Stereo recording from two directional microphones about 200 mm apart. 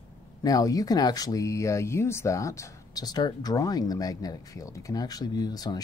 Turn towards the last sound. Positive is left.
turn(degrees=20)  # may be behind; listen again after turning